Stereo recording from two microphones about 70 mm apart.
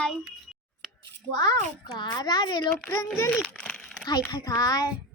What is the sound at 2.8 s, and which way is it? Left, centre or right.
Speech, centre.